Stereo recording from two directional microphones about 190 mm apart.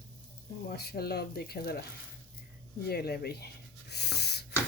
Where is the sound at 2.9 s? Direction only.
55° left (ahead or behind).